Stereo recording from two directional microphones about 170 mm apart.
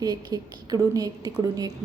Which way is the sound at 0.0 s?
25° right (ahead or behind).